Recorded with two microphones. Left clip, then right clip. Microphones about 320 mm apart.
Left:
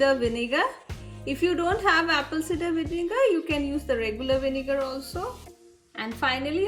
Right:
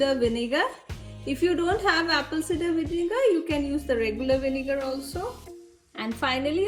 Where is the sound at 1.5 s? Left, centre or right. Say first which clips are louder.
Left 2 dB; centre.